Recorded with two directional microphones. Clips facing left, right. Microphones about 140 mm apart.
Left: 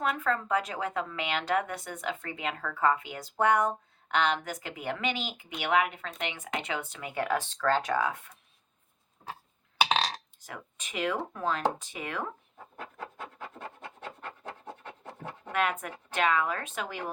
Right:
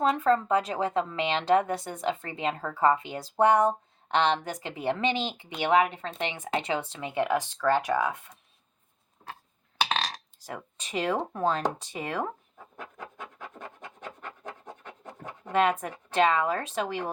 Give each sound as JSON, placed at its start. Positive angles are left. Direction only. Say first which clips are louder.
{"t": 0.0, "sound": "a woman's voice", "louder": "right 6 dB", "side_deg": -30}
{"t": 10.4, "sound": "a woman's voice", "louder": "right 9 dB", "side_deg": -30}
{"t": 13.0, "sound": "scratch", "louder": "left 2 dB", "side_deg": -15}
{"t": 15.5, "sound": "a woman's voice", "louder": "right 5 dB", "side_deg": -30}